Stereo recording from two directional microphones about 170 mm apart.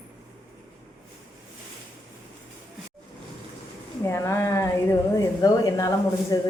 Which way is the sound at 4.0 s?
15° left (ahead or behind).